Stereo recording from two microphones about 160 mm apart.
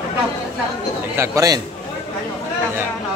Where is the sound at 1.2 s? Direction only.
20° right (ahead or behind).